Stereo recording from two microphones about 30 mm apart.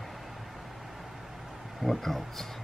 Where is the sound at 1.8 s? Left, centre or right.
Centre.